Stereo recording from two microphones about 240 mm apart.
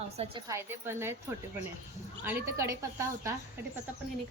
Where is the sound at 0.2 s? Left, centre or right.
Centre.